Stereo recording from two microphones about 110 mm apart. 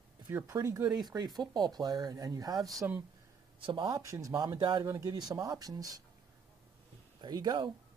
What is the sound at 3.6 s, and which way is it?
Speech, 50° right (ahead or behind).